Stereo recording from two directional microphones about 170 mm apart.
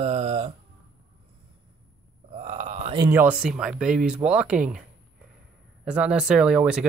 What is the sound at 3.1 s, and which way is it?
Speech, 10° right (ahead or behind).